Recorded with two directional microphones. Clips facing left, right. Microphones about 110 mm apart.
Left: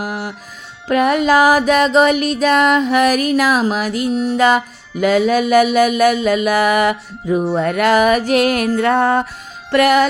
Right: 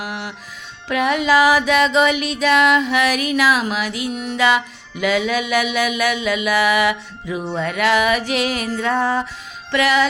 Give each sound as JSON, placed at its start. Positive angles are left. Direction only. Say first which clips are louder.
{"t": 0.0, "sound": "music", "louder": "left 4 dB", "side_deg": 40}